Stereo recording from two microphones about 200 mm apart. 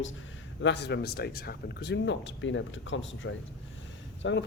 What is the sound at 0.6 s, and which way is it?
Speech, 60° left (ahead or behind).